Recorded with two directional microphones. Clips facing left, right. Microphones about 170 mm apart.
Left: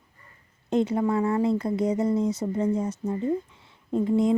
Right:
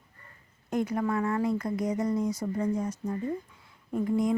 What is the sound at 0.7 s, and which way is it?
Speech, 25° left (ahead or behind).